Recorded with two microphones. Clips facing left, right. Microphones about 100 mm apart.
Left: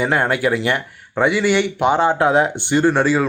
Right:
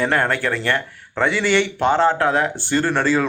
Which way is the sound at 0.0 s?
10° left (ahead or behind).